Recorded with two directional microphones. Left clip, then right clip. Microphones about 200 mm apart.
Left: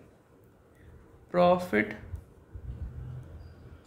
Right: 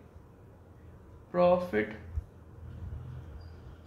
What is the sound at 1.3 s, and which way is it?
Speech, 55° left (ahead or behind).